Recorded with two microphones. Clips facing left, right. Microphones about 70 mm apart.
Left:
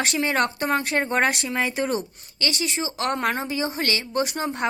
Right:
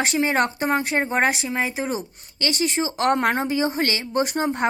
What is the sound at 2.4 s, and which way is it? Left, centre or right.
Speech, right.